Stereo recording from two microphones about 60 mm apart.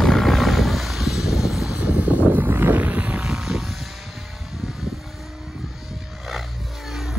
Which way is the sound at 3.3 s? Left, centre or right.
Centre.